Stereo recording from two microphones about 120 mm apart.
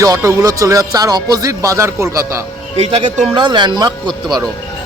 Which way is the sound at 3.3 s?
40° right (ahead or behind).